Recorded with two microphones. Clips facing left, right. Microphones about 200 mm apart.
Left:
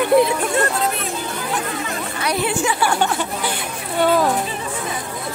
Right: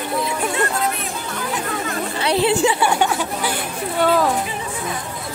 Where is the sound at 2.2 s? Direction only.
30° right (ahead or behind).